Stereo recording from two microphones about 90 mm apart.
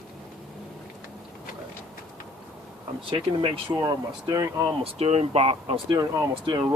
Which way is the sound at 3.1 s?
75° right (ahead or behind).